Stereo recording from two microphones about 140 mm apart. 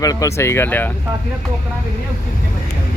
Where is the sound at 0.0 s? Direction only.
25° left (ahead or behind).